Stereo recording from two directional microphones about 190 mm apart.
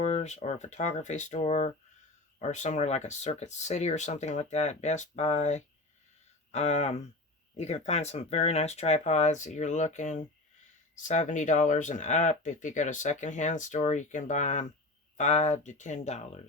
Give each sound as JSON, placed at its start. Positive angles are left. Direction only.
{"t": 0.0, "sound": "speech", "side_deg": 35}